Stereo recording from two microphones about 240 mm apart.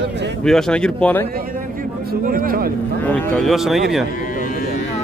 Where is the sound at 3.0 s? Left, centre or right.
Centre.